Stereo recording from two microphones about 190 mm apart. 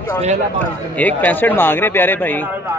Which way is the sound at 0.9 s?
10° left (ahead or behind).